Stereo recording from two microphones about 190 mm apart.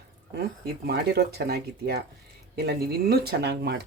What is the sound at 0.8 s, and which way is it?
Speech, 55° right (ahead or behind).